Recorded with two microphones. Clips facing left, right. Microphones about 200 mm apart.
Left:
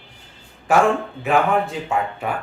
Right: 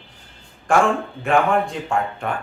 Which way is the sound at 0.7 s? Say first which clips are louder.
Left 1 dB; 5° left (ahead or behind).